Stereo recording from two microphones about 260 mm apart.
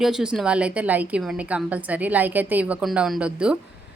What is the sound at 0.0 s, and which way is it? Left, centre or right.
A woman's voice, centre.